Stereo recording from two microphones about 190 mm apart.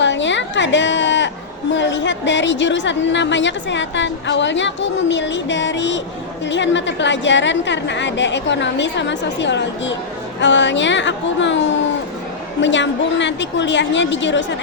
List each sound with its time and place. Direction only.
0.0 s a sound: 70° left (ahead or behind)
1.7 s a woman's voice: 70° left (ahead or behind)
12.6 s a woman's voice: 70° left (ahead or behind)